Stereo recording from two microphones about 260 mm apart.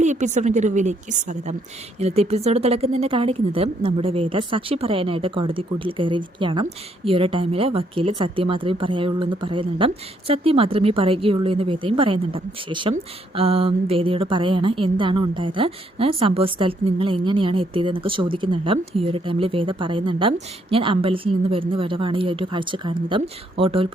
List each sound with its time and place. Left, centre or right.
0.0 s a woman's voice: right